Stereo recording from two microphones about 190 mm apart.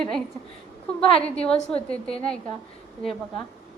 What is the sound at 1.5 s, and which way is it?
Speech, 30° left (ahead or behind).